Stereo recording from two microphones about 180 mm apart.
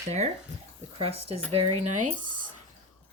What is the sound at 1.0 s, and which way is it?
Speech, 35° right (ahead or behind).